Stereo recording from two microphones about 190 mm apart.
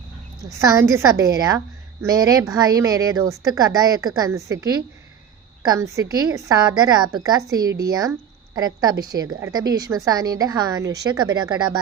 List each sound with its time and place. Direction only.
0.6 s a woman's voice: 15° right (ahead or behind)